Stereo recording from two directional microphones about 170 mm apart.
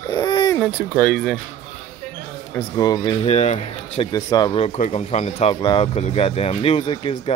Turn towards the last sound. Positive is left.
turn(degrees=35)  # may be behind; listen again after turning